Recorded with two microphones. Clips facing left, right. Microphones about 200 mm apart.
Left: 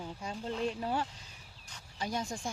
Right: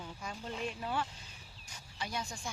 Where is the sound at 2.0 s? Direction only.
45° left (ahead or behind).